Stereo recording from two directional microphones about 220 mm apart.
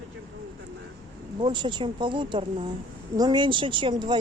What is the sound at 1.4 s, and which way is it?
Speech, 20° right (ahead or behind).